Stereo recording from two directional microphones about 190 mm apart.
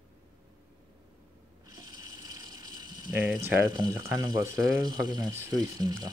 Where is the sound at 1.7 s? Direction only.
20° right (ahead or behind).